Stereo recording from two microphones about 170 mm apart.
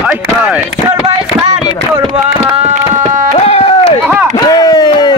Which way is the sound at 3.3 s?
40° left (ahead or behind).